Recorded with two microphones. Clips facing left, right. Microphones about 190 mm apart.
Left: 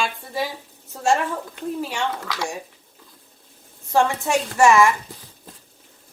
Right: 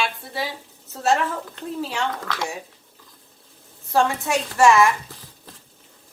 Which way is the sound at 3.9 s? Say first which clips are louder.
Left 1 dB; 15° left (ahead or behind).